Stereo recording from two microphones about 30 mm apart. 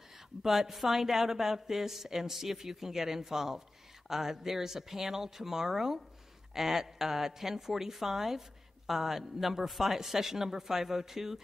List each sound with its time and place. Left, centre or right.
0.4 s a woman's voice: centre